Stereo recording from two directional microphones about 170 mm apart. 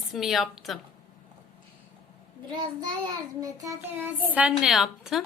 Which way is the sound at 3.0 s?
20° right (ahead or behind).